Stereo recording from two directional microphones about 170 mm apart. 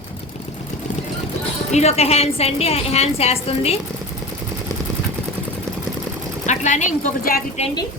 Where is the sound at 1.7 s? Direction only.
40° left (ahead or behind).